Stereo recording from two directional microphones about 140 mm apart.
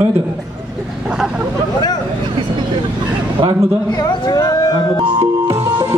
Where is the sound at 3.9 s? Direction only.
30° left (ahead or behind).